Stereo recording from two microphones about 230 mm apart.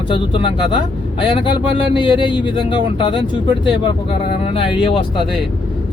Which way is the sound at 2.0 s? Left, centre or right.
Left.